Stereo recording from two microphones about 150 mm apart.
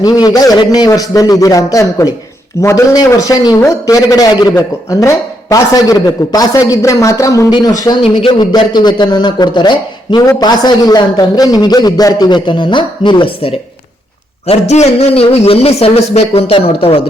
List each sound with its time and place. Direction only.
0.0 s a man's voice: 25° left (ahead or behind)